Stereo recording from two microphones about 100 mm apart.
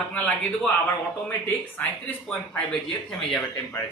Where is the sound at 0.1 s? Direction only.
15° left (ahead or behind).